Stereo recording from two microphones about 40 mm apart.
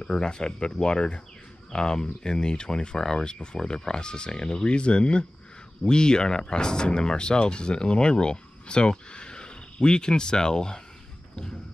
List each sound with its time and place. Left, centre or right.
0.0 s speech: left